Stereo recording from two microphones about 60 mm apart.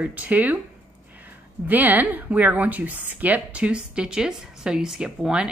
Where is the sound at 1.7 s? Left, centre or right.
Right.